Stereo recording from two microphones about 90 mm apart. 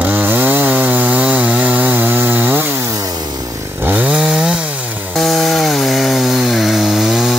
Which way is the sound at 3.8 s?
15° right (ahead or behind).